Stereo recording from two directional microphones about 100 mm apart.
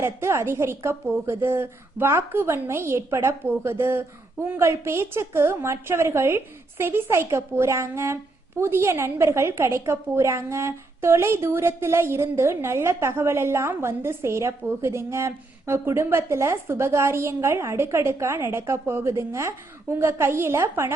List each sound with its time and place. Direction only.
0.0 s a woman's voice: 25° right (ahead or behind)